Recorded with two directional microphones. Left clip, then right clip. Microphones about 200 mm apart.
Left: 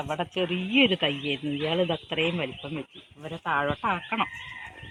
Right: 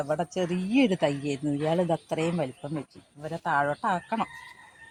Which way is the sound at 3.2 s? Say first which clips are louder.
Right 1 dB; 45° right (ahead or behind).